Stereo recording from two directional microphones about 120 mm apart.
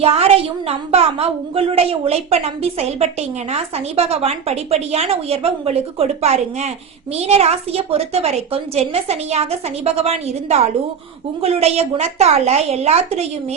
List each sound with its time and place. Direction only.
0.0 s a woman's voice: 55° right (ahead or behind)